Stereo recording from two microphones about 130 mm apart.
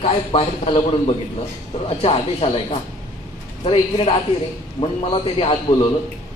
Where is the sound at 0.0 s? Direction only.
45° left (ahead or behind).